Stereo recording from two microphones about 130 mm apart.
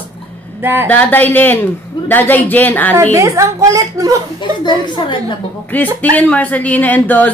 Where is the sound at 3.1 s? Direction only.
25° right (ahead or behind).